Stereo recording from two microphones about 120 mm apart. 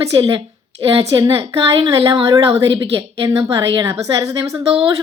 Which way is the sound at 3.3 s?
30° right (ahead or behind).